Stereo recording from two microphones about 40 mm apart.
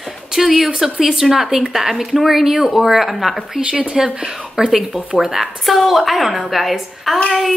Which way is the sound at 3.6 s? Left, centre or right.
Right.